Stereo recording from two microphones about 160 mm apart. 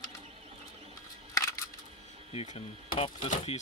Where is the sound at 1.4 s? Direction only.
20° left (ahead or behind).